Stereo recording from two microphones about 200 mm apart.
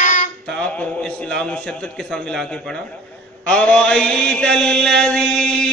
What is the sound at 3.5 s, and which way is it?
Mantra, 5° left (ahead or behind).